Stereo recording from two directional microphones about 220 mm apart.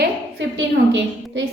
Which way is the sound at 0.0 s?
55° right (ahead or behind).